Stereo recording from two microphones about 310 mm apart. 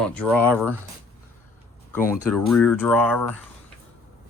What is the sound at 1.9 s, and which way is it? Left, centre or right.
Speech, centre.